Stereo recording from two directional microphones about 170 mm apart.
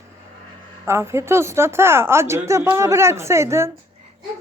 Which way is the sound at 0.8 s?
15° right (ahead or behind).